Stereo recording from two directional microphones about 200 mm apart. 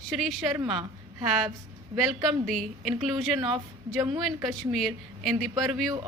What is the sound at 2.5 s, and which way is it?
Speech, centre (ahead or behind).